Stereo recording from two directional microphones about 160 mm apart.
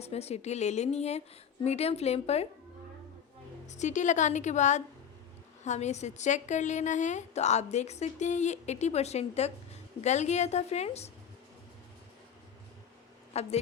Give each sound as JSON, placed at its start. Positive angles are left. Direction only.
{"t": 0.0, "sound": "a woman's voice", "side_deg": 40}
{"t": 3.7, "sound": "a woman's voice", "side_deg": 50}
{"t": 13.3, "sound": "a woman's voice", "side_deg": 40}